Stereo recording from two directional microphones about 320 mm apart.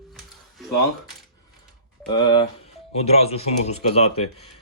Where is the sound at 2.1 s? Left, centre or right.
Centre.